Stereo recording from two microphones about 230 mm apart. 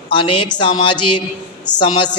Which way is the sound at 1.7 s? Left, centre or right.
Centre.